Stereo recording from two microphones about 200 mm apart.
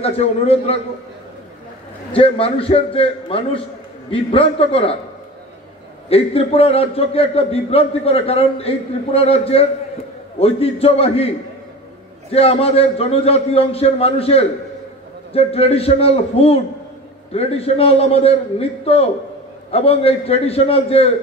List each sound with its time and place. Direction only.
0.0 s a man's voice: 30° left (ahead or behind)
2.1 s a man's voice: 30° left (ahead or behind)
6.0 s a man's voice: 30° left (ahead or behind)